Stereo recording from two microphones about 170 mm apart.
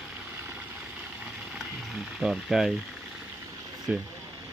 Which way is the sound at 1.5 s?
Centre (ahead or behind).